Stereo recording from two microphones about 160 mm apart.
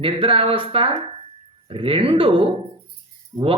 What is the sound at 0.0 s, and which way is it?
Speech, 35° right (ahead or behind).